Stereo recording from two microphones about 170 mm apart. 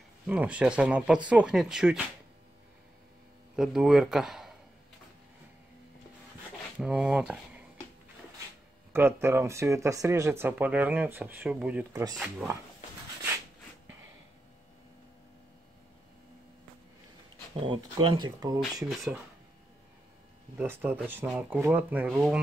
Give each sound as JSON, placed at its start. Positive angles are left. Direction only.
{"t": 0.3, "sound": "speech", "side_deg": -5}
{"t": 3.5, "sound": "speech", "side_deg": -5}
{"t": 6.8, "sound": "speech", "side_deg": -10}
{"t": 8.9, "sound": "speech", "side_deg": -15}
{"t": 11.9, "sound": "speech", "side_deg": -20}
{"t": 12.2, "sound": "speech", "side_deg": -5}
{"t": 17.6, "sound": "speech", "side_deg": -25}
{"t": 20.5, "sound": "speech", "side_deg": -10}